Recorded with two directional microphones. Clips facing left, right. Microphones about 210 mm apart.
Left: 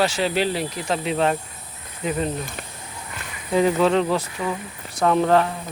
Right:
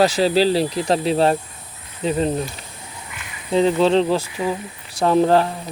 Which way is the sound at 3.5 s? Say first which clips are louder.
Right 2 dB; 25° right (ahead or behind).